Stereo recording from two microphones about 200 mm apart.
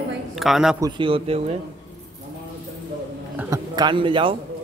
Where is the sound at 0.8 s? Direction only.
25° right (ahead or behind).